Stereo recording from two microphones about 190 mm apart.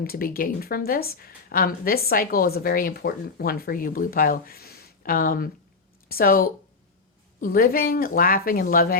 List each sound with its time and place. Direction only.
0.0 s a woman's voice: 50° left (ahead or behind)